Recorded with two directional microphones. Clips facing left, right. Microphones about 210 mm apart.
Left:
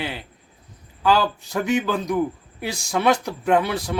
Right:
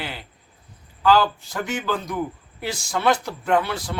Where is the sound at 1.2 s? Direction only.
15° left (ahead or behind).